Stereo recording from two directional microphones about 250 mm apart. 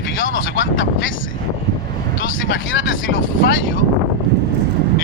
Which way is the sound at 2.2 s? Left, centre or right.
Left.